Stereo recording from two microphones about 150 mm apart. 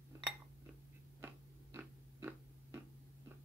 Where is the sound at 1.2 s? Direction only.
15° right (ahead or behind).